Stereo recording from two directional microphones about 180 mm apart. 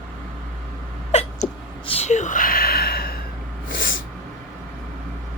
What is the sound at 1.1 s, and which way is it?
Cat, 35° left (ahead or behind).